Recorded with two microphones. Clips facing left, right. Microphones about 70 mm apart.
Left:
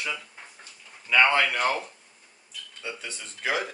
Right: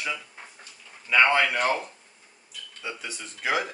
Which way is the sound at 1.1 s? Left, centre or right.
Centre.